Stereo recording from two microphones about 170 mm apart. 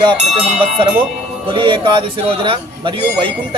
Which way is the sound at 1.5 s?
30° right (ahead or behind).